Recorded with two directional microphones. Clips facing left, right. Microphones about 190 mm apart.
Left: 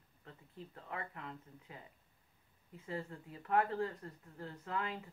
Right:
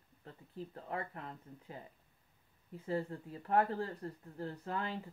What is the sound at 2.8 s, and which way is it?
Speech, 35° right (ahead or behind).